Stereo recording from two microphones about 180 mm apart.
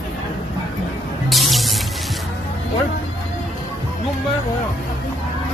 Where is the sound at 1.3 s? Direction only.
Centre (ahead or behind).